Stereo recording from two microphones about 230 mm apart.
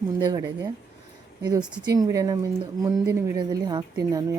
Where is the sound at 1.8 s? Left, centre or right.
Centre.